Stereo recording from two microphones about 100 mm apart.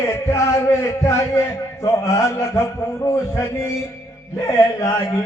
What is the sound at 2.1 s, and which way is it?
A man's voice, 30° left (ahead or behind).